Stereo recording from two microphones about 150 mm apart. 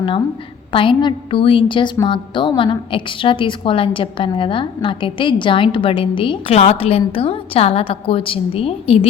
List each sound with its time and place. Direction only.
0.7 s a woman's voice: 35° left (ahead or behind)